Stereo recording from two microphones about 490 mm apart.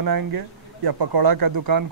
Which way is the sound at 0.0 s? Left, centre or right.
Right.